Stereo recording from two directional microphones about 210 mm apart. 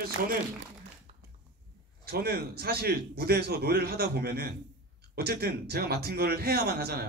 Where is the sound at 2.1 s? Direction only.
45° right (ahead or behind).